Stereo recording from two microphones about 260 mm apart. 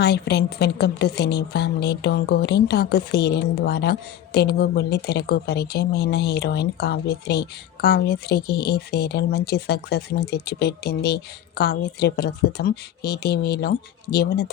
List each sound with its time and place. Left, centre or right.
0.0 s a woman's voice: left